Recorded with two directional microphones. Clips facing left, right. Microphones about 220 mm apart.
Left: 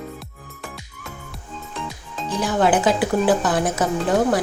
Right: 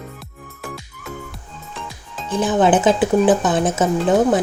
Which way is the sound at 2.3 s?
20° right (ahead or behind).